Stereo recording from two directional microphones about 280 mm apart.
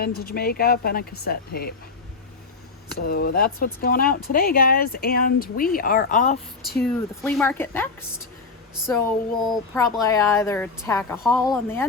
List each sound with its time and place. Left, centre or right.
0.0 s speech: left
2.9 s speech: left
6.8 s a woman's voice: centre
9.5 s a woman's voice: centre